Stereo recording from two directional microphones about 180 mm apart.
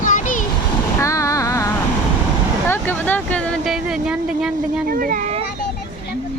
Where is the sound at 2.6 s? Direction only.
10° left (ahead or behind).